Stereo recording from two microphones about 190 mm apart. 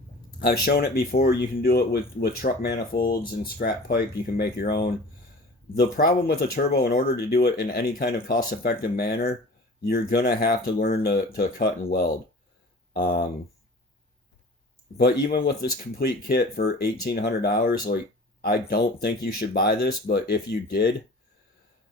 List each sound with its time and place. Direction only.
0.3 s speech: 55° left (ahead or behind)
14.9 s speech: 55° left (ahead or behind)